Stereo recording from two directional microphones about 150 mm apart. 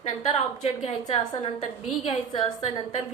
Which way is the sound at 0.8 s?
45° left (ahead or behind).